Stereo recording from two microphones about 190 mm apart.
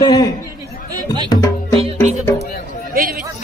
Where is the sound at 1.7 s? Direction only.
30° right (ahead or behind).